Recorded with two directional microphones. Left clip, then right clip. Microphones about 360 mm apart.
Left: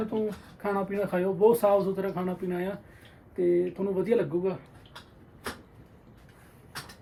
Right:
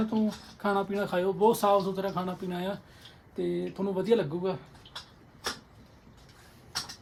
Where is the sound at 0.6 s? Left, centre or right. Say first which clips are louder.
Even; centre.